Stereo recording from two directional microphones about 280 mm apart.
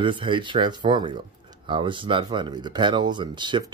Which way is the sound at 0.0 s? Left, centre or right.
Centre.